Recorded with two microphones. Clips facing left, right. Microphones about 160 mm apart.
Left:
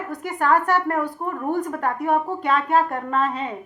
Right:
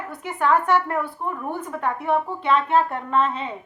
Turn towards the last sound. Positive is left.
turn(degrees=40)  # may be behind; listen again after turning